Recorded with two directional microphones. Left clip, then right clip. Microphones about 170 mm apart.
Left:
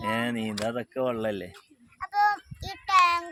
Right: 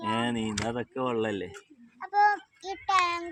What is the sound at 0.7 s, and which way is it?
Speech, 35° left (ahead or behind).